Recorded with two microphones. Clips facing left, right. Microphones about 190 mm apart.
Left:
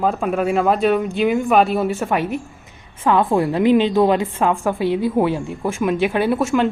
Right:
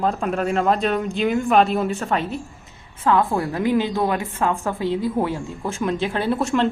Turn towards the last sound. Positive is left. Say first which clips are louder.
# left 3 dB
turn(degrees=5)  # may be behind; listen again after turning